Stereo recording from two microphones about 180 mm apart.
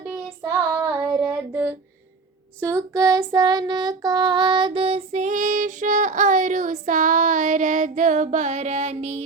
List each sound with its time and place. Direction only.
0.1 s child singing: 10° right (ahead or behind)
2.6 s child singing: 15° right (ahead or behind); by 9.2 s 40° right (ahead or behind)